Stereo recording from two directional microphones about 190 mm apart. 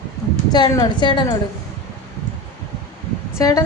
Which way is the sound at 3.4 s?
20° left (ahead or behind).